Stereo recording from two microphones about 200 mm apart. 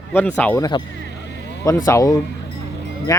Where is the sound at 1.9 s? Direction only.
15° left (ahead or behind).